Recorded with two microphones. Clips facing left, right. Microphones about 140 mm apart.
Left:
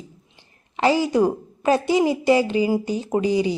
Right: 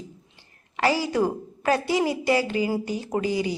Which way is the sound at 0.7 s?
20° left (ahead or behind).